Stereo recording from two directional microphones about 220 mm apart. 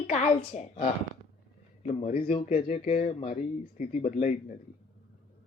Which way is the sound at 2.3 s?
25° left (ahead or behind).